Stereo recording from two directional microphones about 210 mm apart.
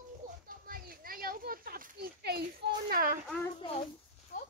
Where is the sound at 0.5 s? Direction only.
45° right (ahead or behind).